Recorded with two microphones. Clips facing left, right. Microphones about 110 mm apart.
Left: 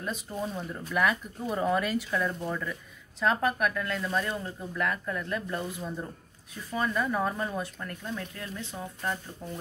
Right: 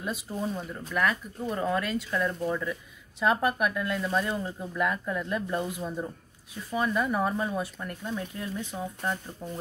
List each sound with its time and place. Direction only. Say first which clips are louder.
0.0 s speech: right 1 dB; 5° right (ahead or behind)